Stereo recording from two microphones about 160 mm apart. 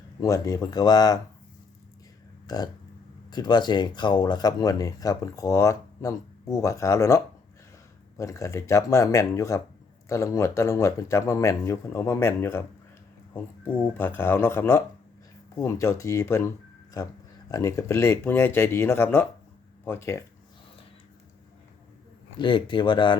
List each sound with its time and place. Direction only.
0.2 s speech: 20° left (ahead or behind)
2.5 s speech: 25° left (ahead or behind)
8.2 s speech: 20° left (ahead or behind)
13.9 s speech: 15° left (ahead or behind)
17.5 s speech: 20° left (ahead or behind)
22.4 s speech: 30° left (ahead or behind)